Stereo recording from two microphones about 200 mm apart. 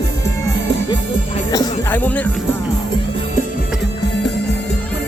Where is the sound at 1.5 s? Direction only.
15° left (ahead or behind).